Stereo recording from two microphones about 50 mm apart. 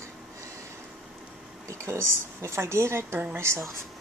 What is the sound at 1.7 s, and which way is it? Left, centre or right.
Speech, right.